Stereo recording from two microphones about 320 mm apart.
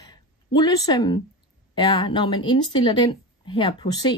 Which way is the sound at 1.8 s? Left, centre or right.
Centre.